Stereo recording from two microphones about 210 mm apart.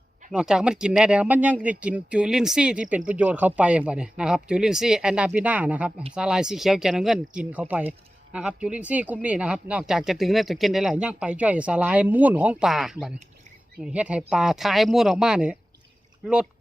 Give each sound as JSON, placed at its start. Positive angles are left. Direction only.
{"t": 0.3, "sound": "speech", "side_deg": -5}